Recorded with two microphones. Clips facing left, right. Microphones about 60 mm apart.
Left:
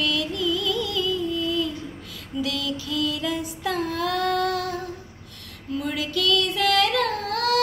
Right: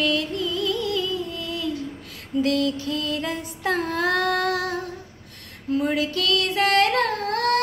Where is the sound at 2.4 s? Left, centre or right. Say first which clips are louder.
Right 6 dB; right.